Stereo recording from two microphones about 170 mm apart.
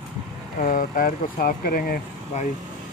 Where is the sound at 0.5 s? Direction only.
55° left (ahead or behind).